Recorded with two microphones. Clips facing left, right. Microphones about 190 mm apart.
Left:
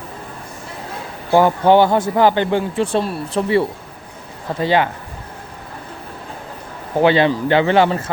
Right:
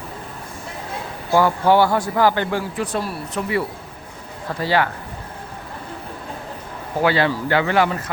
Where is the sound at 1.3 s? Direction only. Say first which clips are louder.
Left 3 dB; 20° left (ahead or behind).